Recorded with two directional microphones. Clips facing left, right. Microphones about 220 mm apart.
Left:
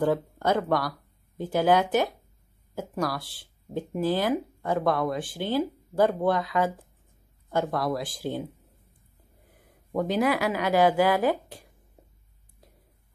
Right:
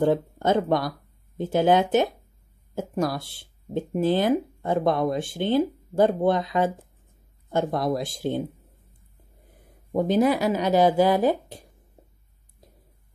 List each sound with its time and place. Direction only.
0.0 s speech: 25° right (ahead or behind)
9.9 s speech: 25° right (ahead or behind)